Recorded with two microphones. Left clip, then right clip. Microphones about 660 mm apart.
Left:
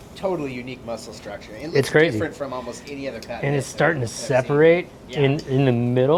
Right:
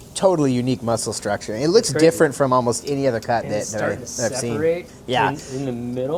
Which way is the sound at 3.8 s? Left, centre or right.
Left.